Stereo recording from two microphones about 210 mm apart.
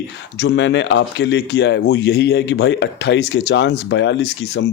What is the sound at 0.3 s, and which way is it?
Speech, 55° left (ahead or behind).